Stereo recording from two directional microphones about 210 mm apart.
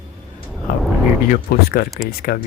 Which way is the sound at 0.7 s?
40° left (ahead or behind).